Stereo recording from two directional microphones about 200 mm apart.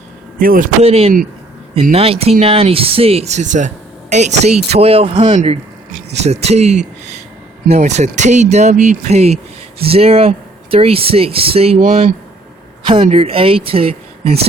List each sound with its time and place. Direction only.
0.3 s a man's voice: 45° right (ahead or behind)
0.8 s speech: 30° right (ahead or behind)
11.8 s speech: 45° right (ahead or behind)
12.8 s speech: 25° right (ahead or behind)